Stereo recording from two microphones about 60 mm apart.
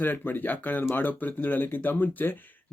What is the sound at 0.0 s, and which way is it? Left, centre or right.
Speech, left.